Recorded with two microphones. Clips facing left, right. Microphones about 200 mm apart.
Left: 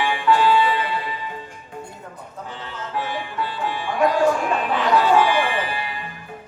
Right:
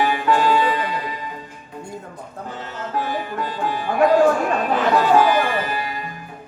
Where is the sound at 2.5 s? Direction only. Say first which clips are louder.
Right 3 dB; 45° right (ahead or behind).